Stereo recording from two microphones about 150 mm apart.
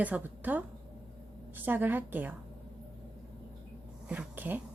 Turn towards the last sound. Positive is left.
turn(degrees=-10)  # may be behind; listen again after turning